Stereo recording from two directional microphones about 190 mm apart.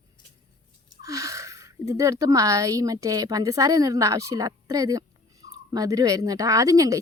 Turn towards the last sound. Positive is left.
turn(degrees=-15)  # may be behind; listen again after turning